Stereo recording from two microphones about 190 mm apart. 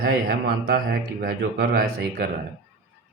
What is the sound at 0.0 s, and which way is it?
Speech, 55° right (ahead or behind).